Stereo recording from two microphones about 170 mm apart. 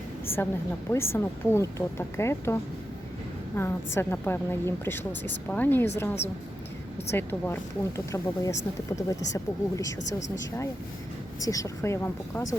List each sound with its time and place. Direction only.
0.3 s speech: 15° left (ahead or behind)
7.1 s speech: 15° left (ahead or behind)
10.0 s speech: 45° left (ahead or behind)
11.3 s speech: 20° left (ahead or behind)